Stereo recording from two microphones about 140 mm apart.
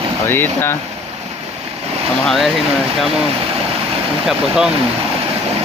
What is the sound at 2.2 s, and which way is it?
Speech, centre (ahead or behind).